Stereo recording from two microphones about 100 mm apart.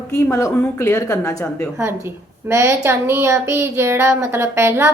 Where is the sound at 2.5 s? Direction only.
25° right (ahead or behind).